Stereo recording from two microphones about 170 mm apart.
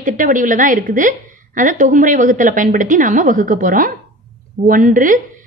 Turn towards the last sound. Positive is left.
turn(degrees=-50)  # may be behind; listen again after turning